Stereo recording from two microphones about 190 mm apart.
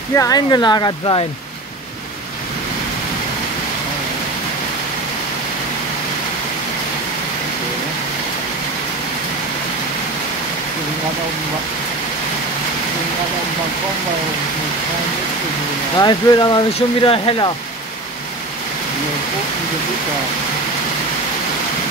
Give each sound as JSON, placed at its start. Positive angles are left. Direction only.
{"t": 0.1, "sound": "speech", "side_deg": 20}
{"t": 16.0, "sound": "speech", "side_deg": 20}